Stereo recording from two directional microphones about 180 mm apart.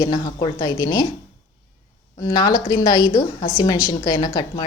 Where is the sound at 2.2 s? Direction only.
20° left (ahead or behind).